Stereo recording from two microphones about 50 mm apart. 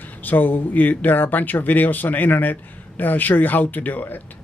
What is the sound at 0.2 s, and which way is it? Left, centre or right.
Speech, left.